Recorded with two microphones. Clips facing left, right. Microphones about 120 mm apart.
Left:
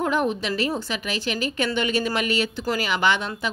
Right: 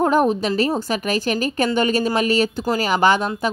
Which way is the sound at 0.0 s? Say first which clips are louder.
Right 6 dB; 40° right (ahead or behind).